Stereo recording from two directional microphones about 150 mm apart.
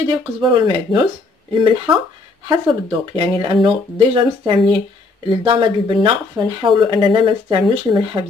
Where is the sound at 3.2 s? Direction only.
35° right (ahead or behind).